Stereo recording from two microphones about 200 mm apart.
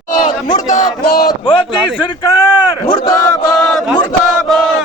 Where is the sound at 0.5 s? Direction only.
40° left (ahead or behind).